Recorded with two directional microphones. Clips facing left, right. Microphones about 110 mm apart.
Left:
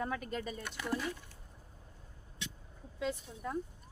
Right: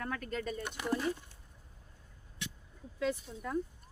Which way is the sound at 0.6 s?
20° right (ahead or behind).